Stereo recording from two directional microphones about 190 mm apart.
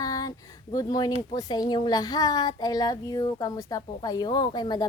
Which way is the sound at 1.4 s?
20° left (ahead or behind).